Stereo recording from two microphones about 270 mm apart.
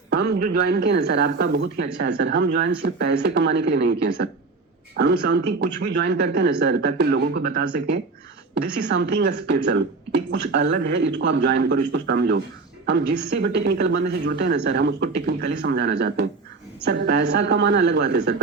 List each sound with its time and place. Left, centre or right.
0.1 s speech: right